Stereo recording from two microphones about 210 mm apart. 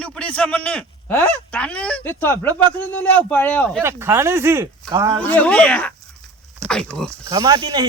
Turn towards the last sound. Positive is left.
turn(degrees=-20)  # may be behind; listen again after turning